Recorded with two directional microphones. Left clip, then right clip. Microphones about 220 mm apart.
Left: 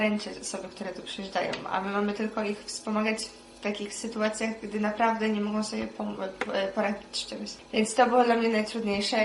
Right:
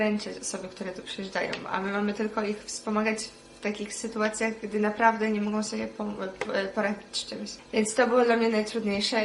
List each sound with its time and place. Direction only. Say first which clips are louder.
1.2 s a woman's voice: left 1 dB; 25° right (ahead or behind)
4.2 s a woman's voice: right 1 dB; 25° right (ahead or behind)